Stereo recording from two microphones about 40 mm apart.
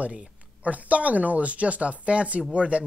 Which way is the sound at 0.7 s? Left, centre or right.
Right.